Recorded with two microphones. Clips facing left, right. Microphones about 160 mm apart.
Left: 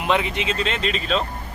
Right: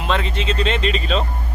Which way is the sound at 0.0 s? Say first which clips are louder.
Even; 15° left (ahead or behind).